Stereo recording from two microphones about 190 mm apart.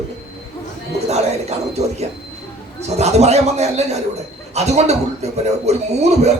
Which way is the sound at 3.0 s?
35° right (ahead or behind).